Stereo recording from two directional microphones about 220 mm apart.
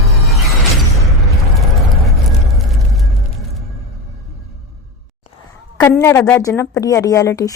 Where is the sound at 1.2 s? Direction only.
Centre (ahead or behind).